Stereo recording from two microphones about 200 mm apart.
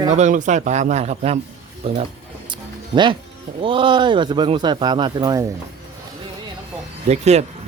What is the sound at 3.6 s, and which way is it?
A man's voice, 25° right (ahead or behind).